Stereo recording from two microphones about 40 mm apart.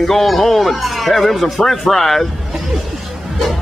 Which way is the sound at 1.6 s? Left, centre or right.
Centre.